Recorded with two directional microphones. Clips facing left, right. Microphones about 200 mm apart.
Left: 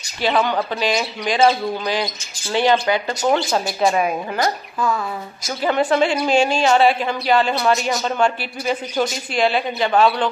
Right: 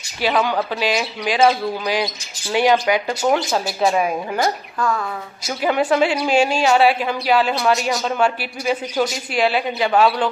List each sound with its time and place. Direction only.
0.2 s a woman's voice: 10° right (ahead or behind)
4.7 s a woman's voice: 5° left (ahead or behind)
5.6 s speech: 10° right (ahead or behind)